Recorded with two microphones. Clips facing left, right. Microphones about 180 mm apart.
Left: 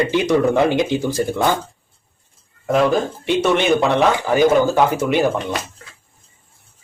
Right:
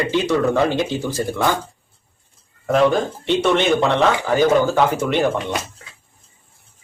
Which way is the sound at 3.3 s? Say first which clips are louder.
Left 1 dB; 10° left (ahead or behind).